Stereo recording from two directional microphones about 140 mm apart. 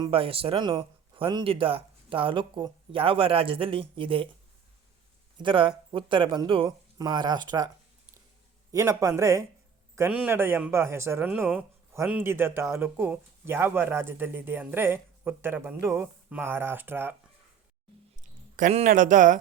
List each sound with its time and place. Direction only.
0.1 s speech: 40° right (ahead or behind)
5.4 s speech: 35° right (ahead or behind)
8.7 s a man's voice: 20° right (ahead or behind)
18.2 s a sound: 70° right (ahead or behind)
18.7 s speech: 55° right (ahead or behind)